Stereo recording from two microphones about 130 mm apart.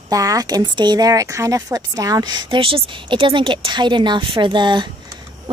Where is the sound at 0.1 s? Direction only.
25° right (ahead or behind).